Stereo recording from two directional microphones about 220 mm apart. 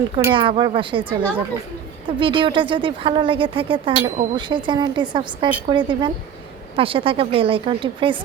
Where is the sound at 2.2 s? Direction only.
20° right (ahead or behind).